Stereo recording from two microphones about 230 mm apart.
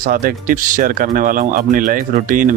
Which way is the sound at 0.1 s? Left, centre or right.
Right.